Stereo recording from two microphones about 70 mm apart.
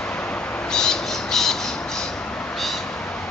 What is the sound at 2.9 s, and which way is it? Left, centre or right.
Cat, centre.